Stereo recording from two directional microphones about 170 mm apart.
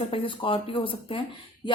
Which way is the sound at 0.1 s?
30° left (ahead or behind).